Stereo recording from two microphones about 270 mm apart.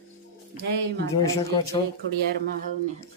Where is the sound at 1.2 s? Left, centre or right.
Centre.